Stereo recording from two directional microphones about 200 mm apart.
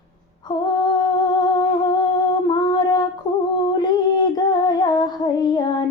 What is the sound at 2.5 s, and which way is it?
Female singing, 20° left (ahead or behind).